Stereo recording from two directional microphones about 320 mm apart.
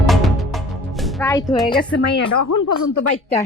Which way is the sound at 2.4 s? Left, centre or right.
Left.